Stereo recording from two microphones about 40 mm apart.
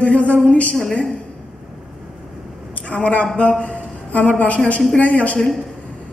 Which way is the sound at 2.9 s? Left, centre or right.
Left.